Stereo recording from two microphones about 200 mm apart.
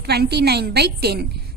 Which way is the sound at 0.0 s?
55° right (ahead or behind).